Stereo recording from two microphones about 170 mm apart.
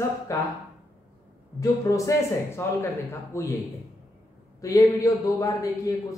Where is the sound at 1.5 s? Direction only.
20° left (ahead or behind).